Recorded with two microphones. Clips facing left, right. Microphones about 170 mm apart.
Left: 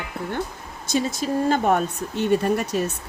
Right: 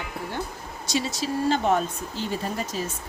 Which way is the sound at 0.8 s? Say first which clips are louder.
Left 4 dB; 50° left (ahead or behind).